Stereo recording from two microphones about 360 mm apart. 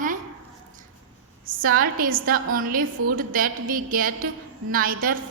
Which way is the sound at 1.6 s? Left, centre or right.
Right.